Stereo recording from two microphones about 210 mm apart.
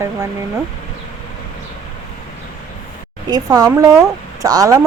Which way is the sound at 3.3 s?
20° right (ahead or behind).